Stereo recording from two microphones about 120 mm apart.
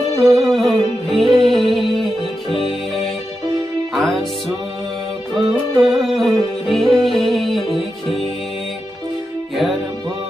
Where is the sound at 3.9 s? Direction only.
Centre (ahead or behind).